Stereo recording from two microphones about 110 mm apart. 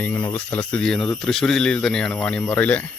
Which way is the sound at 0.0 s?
15° left (ahead or behind).